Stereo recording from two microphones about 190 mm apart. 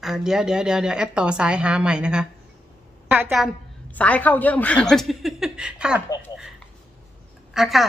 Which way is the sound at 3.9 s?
10° left (ahead or behind).